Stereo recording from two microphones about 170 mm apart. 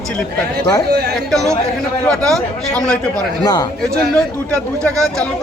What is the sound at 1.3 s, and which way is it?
A man's voice, centre (ahead or behind).